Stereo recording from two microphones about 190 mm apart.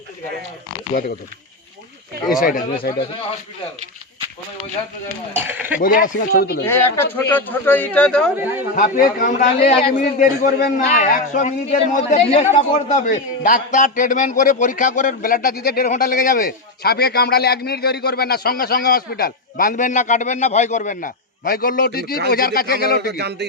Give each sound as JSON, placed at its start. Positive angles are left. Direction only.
{"t": 2.4, "sound": "a man's voice", "side_deg": 45}
{"t": 5.3, "sound": "speech", "side_deg": -10}
{"t": 5.8, "sound": "a man's voice", "side_deg": 45}
{"t": 6.7, "sound": "speech", "side_deg": 15}
{"t": 8.4, "sound": "speech", "side_deg": -10}
{"t": 8.7, "sound": "a man's voice", "side_deg": 45}
{"t": 23.1, "sound": "speech", "side_deg": -60}